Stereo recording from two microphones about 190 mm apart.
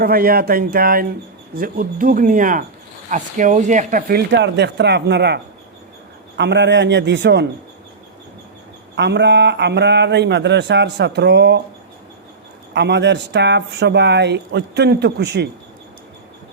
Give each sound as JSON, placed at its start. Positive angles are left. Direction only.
{"t": 0.0, "sound": "speech", "side_deg": -50}
{"t": 4.3, "sound": "speech", "side_deg": -65}
{"t": 9.0, "sound": "speech", "side_deg": -65}
{"t": 12.7, "sound": "speech", "side_deg": -65}